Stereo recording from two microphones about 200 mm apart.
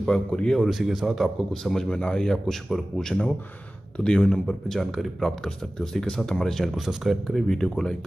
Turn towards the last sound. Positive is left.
turn(degrees=5)  # may be behind; listen again after turning